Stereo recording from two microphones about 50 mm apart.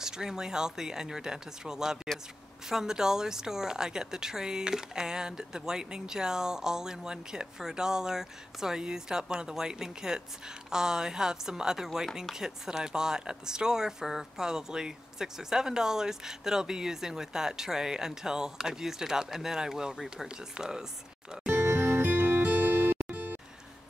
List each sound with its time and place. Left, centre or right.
0.0 s speech: centre
21.6 s music: right